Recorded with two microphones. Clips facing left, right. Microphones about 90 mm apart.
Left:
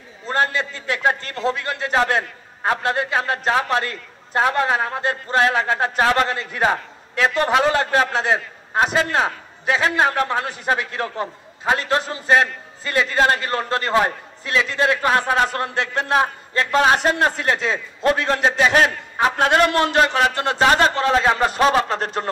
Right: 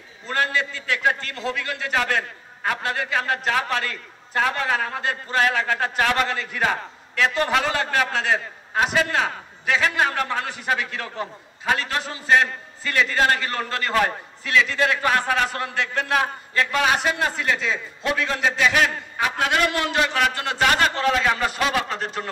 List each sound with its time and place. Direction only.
0.3 s a man's voice: 25° left (ahead or behind)